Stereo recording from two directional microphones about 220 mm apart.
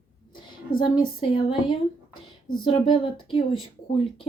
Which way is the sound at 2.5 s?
25° left (ahead or behind).